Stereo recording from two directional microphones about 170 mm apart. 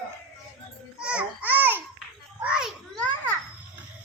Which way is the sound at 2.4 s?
5° right (ahead or behind).